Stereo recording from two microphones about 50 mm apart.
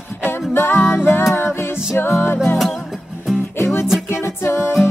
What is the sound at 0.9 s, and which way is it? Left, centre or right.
Music, left.